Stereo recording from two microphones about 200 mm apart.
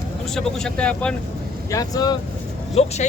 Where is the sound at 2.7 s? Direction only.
30° left (ahead or behind).